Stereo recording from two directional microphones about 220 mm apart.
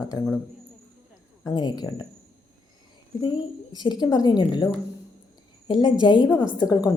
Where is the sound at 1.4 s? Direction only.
20° left (ahead or behind).